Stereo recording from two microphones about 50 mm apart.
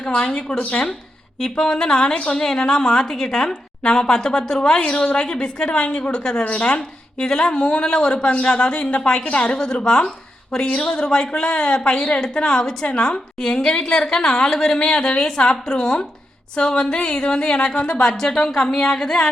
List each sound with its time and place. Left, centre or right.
0.0 s speech: left
1.4 s a woman's voice: centre